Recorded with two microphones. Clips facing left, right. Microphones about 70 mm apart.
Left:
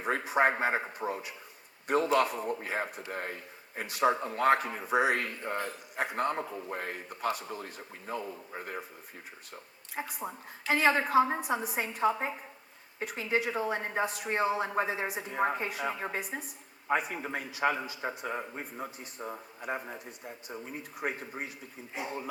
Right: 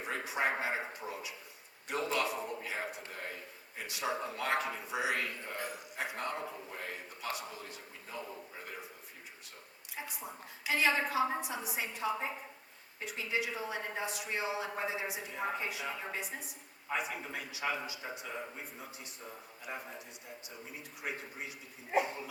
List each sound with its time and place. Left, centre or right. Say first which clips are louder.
0.0 s a woman's voice: left 7 dB; left
9.9 s a woman's voice: left 6 dB; left